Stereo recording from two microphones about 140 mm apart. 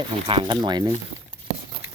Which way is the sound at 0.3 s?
35° right (ahead or behind).